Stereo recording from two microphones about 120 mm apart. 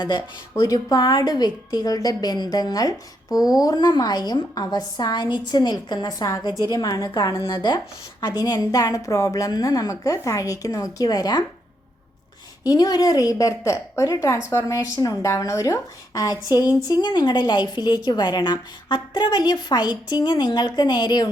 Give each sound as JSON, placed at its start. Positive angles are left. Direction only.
{"t": 0.5, "sound": "a woman's voice", "side_deg": 25}
{"t": 7.5, "sound": "a woman's voice", "side_deg": 40}
{"t": 12.6, "sound": "a woman's voice", "side_deg": 35}